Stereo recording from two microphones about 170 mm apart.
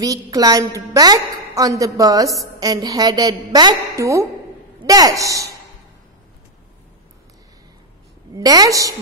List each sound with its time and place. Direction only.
0.0 s a woman's voice: 20° right (ahead or behind)
8.4 s a woman's voice: 20° right (ahead or behind)